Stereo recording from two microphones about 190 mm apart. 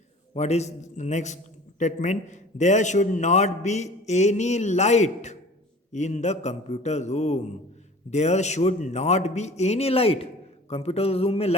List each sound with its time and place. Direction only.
0.3 s a man's voice: 35° left (ahead or behind)